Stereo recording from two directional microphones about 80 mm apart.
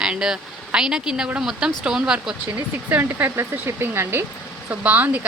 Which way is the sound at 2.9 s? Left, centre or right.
Right.